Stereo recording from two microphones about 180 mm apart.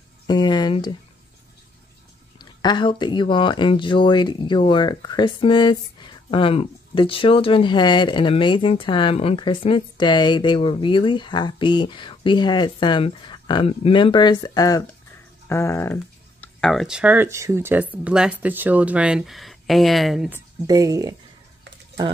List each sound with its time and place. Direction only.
0.3 s speech: 25° left (ahead or behind)
2.3 s speech: 25° left (ahead or behind); by 21.2 s 20° right (ahead or behind)